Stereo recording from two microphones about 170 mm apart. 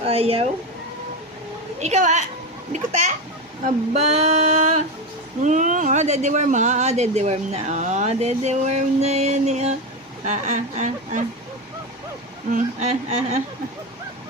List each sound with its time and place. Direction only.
0.0 s speech: 35° right (ahead or behind)
1.8 s speech: 45° right (ahead or behind)
12.5 s speech: 45° right (ahead or behind)